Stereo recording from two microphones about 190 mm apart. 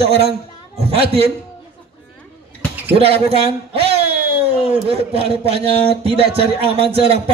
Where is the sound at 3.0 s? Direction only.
30° right (ahead or behind).